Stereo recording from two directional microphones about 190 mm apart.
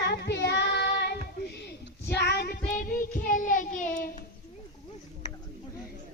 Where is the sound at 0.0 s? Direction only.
65° left (ahead or behind).